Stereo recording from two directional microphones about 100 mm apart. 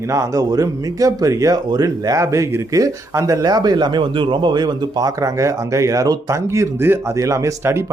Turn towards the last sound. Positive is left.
turn(degrees=-30)  # may be behind; listen again after turning